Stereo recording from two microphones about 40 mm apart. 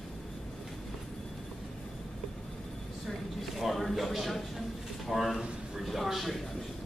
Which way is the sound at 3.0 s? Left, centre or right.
Centre.